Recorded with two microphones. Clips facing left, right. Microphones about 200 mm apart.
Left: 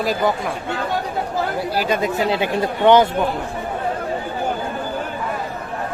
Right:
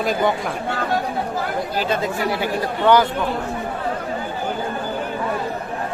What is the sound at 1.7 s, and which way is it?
Speech, 10° left (ahead or behind).